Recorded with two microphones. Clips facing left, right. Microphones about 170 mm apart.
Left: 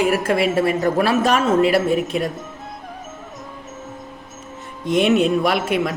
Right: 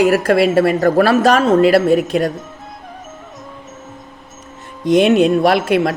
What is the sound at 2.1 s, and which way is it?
Speech, 90° right.